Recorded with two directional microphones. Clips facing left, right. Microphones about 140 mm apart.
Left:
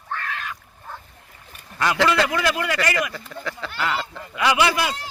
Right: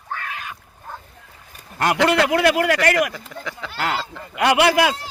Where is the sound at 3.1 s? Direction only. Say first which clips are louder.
Left 1 dB; 15° right (ahead or behind).